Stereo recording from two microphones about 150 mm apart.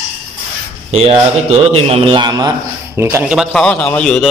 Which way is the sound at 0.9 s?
45° right (ahead or behind).